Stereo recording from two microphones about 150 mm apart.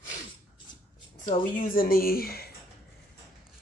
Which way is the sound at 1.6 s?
70° left (ahead or behind).